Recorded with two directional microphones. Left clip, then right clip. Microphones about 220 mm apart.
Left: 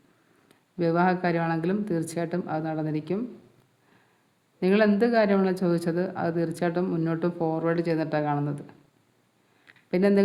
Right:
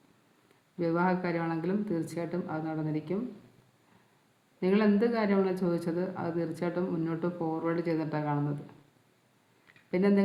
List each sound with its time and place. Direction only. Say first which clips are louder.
0.8 s speech: left 5 dB; 45° left (ahead or behind)
4.6 s speech: left 5 dB; 45° left (ahead or behind)
9.6 s a sound: left 5 dB; 45° left (ahead or behind)